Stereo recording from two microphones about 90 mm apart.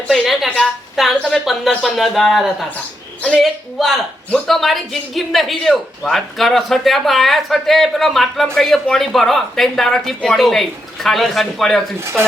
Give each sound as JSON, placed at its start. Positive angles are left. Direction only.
{"t": 0.1, "sound": "speech", "side_deg": 0}
{"t": 11.9, "sound": "speech", "side_deg": -30}